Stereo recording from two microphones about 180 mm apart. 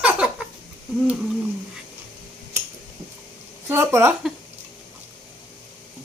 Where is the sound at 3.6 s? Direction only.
15° right (ahead or behind).